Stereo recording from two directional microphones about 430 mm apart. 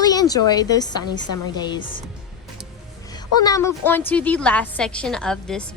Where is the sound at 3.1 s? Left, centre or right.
Centre.